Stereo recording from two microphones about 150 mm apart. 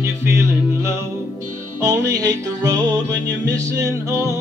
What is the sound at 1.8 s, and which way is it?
Music, 20° right (ahead or behind).